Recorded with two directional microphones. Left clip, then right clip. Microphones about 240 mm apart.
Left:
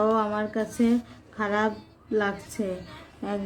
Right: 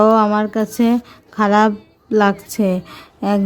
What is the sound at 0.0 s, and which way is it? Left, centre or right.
Speech, right.